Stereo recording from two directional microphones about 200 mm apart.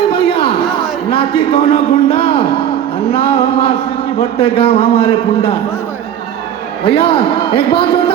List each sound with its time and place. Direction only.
0.1 s a sound: 30° left (ahead or behind)
3.1 s a man's voice: 30° left (ahead or behind)
6.8 s a man's voice: 30° left (ahead or behind)